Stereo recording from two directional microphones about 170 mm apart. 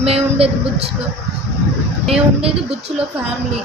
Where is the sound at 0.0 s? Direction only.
35° right (ahead or behind).